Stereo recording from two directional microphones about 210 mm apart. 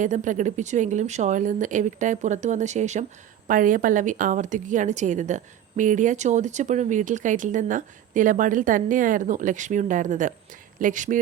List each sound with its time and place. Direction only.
0.0 s a woman's voice: 35° right (ahead or behind)